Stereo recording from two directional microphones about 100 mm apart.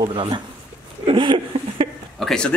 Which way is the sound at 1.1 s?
60° right (ahead or behind).